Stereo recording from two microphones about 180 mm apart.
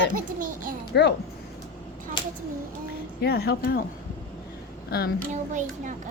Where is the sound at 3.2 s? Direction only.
60° left (ahead or behind).